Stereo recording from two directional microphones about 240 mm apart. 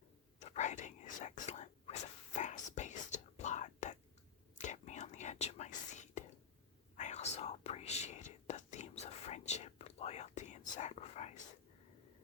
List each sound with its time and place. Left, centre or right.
0.3 s whispering: left